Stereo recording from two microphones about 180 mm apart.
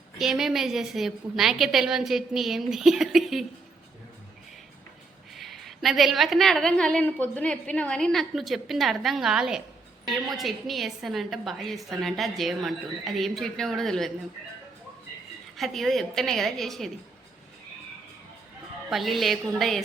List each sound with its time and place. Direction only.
0.2 s a woman's voice: centre (ahead or behind)
5.3 s a woman's voice: centre (ahead or behind)
15.5 s a woman's voice: centre (ahead or behind)
18.9 s a woman's voice: centre (ahead or behind)